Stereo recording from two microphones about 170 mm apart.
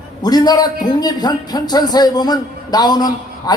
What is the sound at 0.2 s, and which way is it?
A man's voice, 25° left (ahead or behind).